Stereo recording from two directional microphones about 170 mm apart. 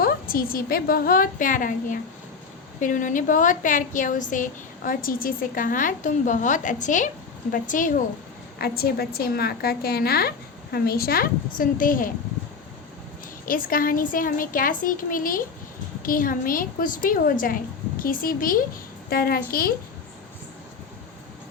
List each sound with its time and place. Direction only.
0.0 s a woman's voice: 60° left (ahead or behind)
8.5 s a woman's voice: 65° left (ahead or behind)
13.4 s a woman's voice: 55° left (ahead or behind)